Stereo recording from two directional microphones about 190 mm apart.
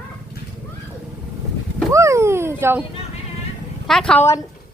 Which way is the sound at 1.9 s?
15° right (ahead or behind).